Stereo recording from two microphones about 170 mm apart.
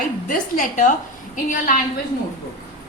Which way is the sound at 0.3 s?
50° left (ahead or behind).